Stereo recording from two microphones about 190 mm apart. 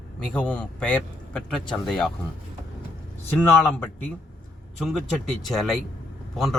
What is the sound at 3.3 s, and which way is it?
A man's voice, 10° left (ahead or behind).